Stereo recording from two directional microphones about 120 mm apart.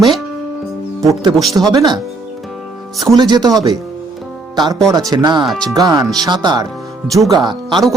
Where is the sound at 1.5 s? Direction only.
30° right (ahead or behind).